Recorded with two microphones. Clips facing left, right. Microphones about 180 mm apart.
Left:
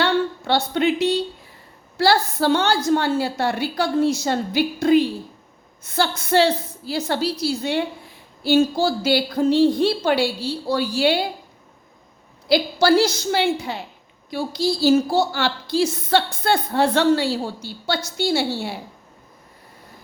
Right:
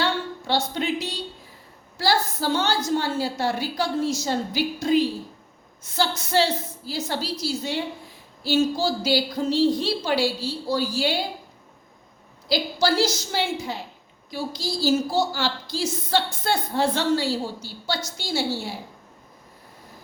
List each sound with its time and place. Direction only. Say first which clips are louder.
0.0 s a sound: left 6 dB; 65° left (ahead or behind)
2.0 s a woman's voice: left 5 dB; 65° left (ahead or behind)
12.5 s a woman's voice: left 6 dB; 60° left (ahead or behind)